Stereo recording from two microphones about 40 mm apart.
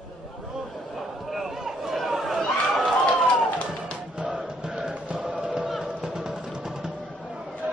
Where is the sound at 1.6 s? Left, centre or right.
Centre.